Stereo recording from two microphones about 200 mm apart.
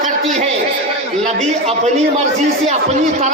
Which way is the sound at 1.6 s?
35° right (ahead or behind).